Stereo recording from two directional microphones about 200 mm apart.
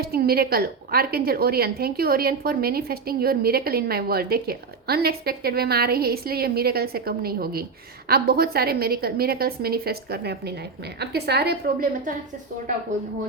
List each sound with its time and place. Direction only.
0.0 s a woman's voice: 50° right (ahead or behind)